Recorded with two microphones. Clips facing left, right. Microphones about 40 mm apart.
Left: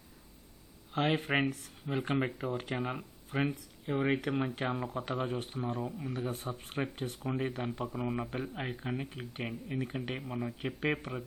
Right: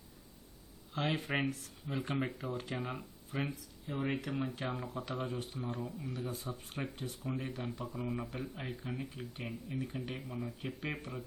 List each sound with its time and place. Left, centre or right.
0.9 s speech: left
2.5 s speech: left
2.7 s speech: centre
3.2 s speech: left
7.3 s speech: left
10.6 s speech: left